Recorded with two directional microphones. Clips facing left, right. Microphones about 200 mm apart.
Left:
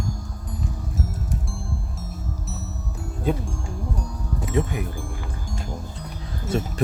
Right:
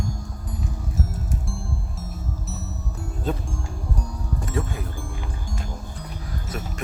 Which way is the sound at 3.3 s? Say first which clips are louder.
Left 3 dB; 10° left (ahead or behind).